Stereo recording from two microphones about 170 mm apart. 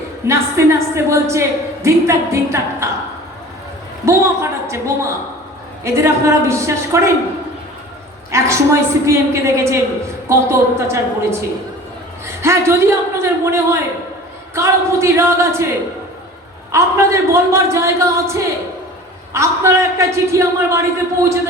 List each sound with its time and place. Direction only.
0.3 s a woman's voice: 15° right (ahead or behind)
4.0 s a woman's voice: 15° right (ahead or behind)
8.3 s a woman's voice: 15° right (ahead or behind)
16.7 s a woman's voice: 15° right (ahead or behind)